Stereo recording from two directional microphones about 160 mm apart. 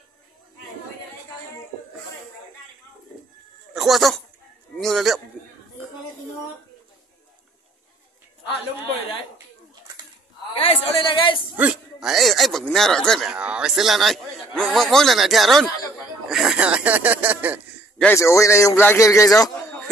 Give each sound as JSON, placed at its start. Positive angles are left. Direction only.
{"t": 3.7, "sound": "a man's voice", "side_deg": 0}
{"t": 10.5, "sound": "a man's voice", "side_deg": 35}
{"t": 11.5, "sound": "speech", "side_deg": -5}
{"t": 17.9, "sound": "a man's voice", "side_deg": 10}